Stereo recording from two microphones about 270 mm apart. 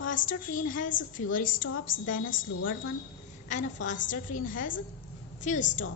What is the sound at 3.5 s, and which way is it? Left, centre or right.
A woman's voice, left.